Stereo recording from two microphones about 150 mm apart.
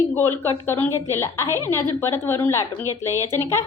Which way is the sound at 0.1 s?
15° left (ahead or behind).